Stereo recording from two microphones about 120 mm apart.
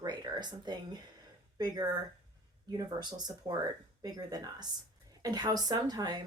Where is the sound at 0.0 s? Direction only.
35° right (ahead or behind).